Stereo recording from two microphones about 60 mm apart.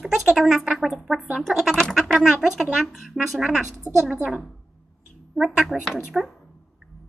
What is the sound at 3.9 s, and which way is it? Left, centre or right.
Speech, right.